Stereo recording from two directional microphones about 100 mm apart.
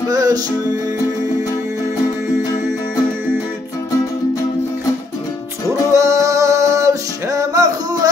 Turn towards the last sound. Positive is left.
turn(degrees=-35)  # may be behind; listen again after turning